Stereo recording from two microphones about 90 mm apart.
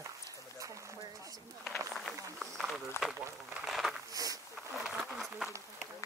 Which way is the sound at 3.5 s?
5° right (ahead or behind).